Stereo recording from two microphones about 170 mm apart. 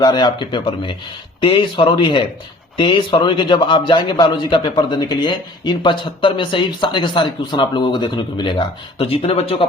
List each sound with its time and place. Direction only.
0.0 s a man's voice: 25° left (ahead or behind)